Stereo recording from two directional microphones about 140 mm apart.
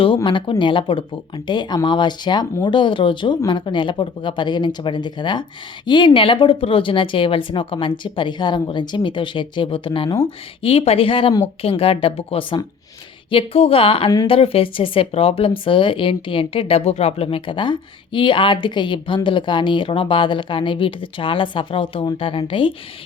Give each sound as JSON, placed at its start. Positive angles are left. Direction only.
{"t": 0.3, "sound": "speech", "side_deg": 35}